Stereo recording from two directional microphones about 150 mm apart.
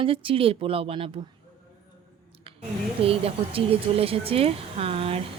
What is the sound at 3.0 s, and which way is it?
Speech, 40° right (ahead or behind).